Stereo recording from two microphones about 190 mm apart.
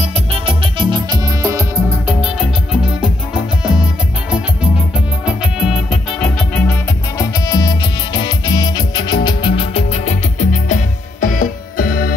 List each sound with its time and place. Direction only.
0.0 s music: 30° right (ahead or behind); by 2.1 s 15° right (ahead or behind)
2.2 s music: 5° right (ahead or behind)
5.2 s music: centre (ahead or behind); by 12.1 s 50° left (ahead or behind)